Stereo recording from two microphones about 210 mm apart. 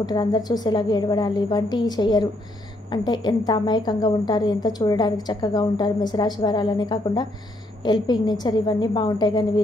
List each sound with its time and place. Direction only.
0.0 s a woman's voice: 20° left (ahead or behind)